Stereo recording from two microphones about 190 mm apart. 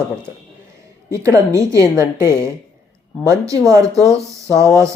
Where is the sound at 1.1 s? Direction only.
15° right (ahead or behind).